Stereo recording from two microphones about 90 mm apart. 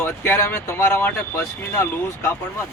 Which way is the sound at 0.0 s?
25° left (ahead or behind).